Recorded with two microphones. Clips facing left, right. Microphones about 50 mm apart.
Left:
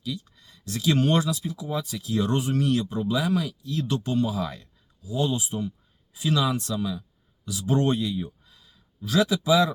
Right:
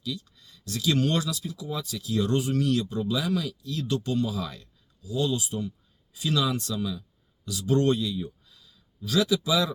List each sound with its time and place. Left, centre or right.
0.0 s speech: centre